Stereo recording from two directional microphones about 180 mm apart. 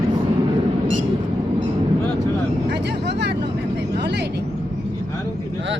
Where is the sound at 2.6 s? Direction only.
70° right (ahead or behind).